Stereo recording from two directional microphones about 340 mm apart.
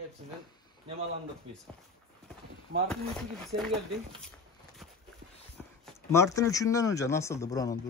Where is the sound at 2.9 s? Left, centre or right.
Centre.